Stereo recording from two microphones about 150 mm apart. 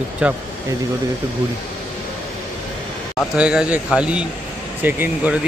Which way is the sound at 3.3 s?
5° right (ahead or behind).